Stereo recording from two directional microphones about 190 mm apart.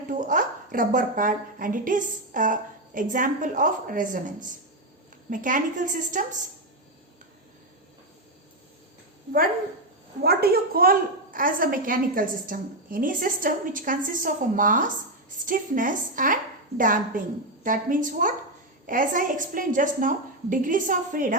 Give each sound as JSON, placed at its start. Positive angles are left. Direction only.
{"t": 0.1, "sound": "a woman's voice", "side_deg": -45}
{"t": 10.2, "sound": "a woman's voice", "side_deg": -55}